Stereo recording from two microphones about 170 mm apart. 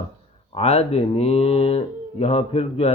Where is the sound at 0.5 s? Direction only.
35° left (ahead or behind).